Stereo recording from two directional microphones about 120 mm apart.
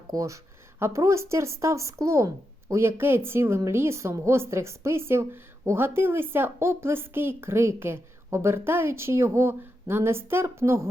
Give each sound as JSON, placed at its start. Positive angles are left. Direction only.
{"t": 0.1, "sound": "speech", "side_deg": -25}